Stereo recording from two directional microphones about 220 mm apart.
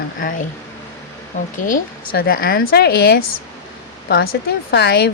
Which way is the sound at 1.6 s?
40° left (ahead or behind).